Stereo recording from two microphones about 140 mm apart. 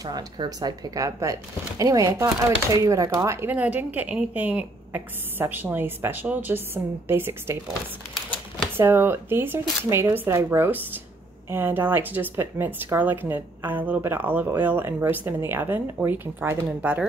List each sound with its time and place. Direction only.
0.0 s speech: 30° right (ahead or behind)
8.7 s speech: 15° right (ahead or behind)